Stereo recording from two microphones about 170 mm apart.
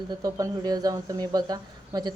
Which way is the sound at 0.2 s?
20° right (ahead or behind).